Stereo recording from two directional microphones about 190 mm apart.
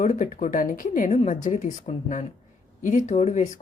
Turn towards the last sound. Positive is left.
turn(degrees=35)  # may be behind; listen again after turning